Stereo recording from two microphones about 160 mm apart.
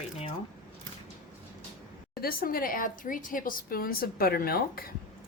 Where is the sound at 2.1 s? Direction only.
65° left (ahead or behind).